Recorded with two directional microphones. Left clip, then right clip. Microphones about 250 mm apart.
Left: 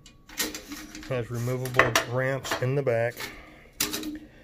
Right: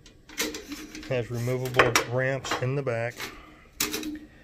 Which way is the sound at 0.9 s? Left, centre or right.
Centre.